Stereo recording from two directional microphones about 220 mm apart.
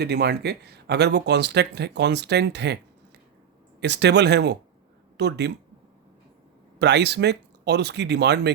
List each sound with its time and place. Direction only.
0.0 s speech: 45° right (ahead or behind)
3.8 s speech: 50° right (ahead or behind)
6.7 s speech: 50° right (ahead or behind)